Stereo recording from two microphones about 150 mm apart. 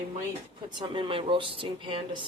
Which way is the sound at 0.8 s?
35° right (ahead or behind).